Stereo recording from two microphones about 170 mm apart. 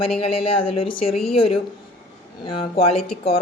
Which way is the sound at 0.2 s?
35° left (ahead or behind).